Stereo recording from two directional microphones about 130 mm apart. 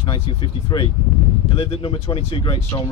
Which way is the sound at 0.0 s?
40° left (ahead or behind).